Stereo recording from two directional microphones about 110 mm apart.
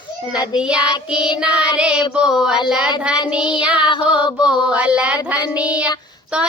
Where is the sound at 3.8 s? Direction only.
45° left (ahead or behind).